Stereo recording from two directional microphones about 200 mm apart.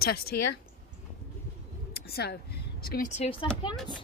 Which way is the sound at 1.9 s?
50° left (ahead or behind).